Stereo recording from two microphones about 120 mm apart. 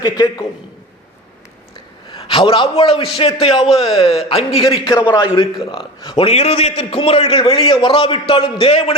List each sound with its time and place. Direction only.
0.0 s a man's voice: 35° left (ahead or behind)
2.1 s a man's voice: 45° left (ahead or behind)